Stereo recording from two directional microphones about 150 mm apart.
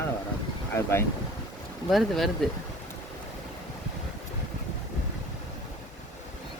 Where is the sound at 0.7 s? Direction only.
15° left (ahead or behind).